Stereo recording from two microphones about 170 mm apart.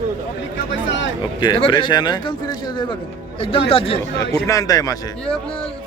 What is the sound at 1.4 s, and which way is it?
Speech, 30° left (ahead or behind).